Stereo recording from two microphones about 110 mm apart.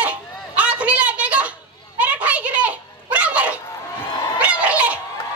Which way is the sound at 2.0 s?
15° right (ahead or behind).